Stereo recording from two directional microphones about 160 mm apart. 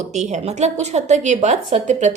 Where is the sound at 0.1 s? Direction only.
45° right (ahead or behind).